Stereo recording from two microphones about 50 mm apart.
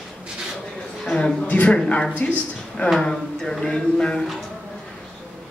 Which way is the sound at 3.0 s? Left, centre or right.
Centre.